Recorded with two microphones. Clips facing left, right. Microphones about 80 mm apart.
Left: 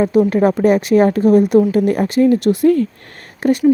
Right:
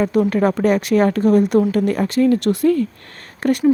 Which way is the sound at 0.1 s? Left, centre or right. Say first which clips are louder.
Left 3 dB; centre.